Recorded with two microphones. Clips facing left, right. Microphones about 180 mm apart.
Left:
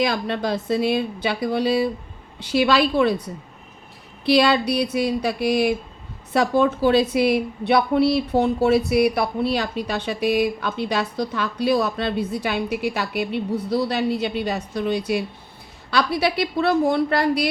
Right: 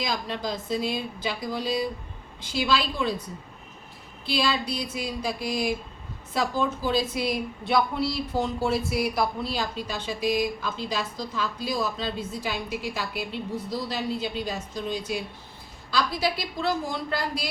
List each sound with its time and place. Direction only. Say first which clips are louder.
0.0 s a woman's voice: left 7 dB; 65° left (ahead or behind)
4.3 s a sound: left 9 dB; 70° left (ahead or behind)
6.3 s a woman's voice: left 8 dB; 65° left (ahead or behind)